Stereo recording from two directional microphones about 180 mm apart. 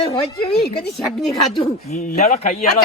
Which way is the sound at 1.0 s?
Centre (ahead or behind).